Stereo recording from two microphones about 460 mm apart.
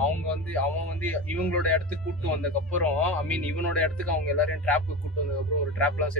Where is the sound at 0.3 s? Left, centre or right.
Centre.